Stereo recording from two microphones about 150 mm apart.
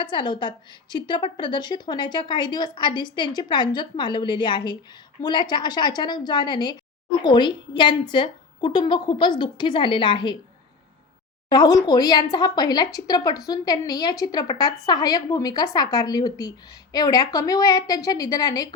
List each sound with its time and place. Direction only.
0.0 s a woman's voice: 30° left (ahead or behind)
11.4 s speech: 25° left (ahead or behind)